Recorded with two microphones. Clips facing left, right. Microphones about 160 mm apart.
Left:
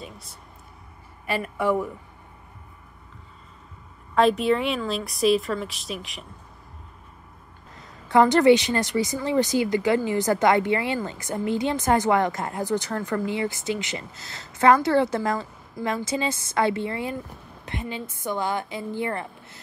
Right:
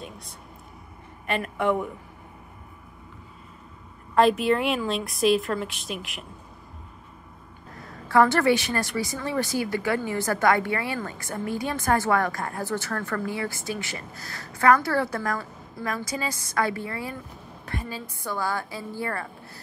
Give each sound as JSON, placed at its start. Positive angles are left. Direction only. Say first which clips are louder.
{"t": 0.0, "sound": "a woman's voice", "louder": "right 1 dB", "side_deg": 0}
{"t": 4.1, "sound": "a woman's voice", "louder": "even", "side_deg": 0}
{"t": 7.7, "sound": "a woman's voice", "louder": "left 1 dB", "side_deg": 20}